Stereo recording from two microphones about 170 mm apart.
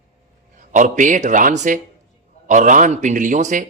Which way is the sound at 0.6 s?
50° right (ahead or behind).